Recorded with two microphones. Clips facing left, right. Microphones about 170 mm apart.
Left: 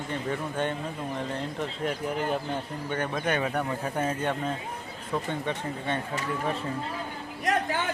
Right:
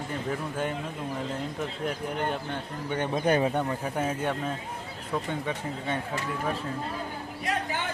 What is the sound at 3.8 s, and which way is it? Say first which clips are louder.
Speech: even; 10° right (ahead or behind).